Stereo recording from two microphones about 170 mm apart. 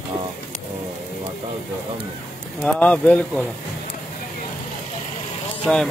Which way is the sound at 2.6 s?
5° left (ahead or behind).